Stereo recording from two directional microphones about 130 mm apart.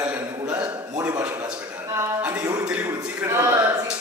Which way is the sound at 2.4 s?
25° right (ahead or behind).